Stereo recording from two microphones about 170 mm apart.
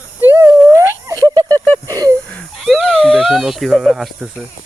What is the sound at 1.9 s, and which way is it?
Wheeze, 20° right (ahead or behind).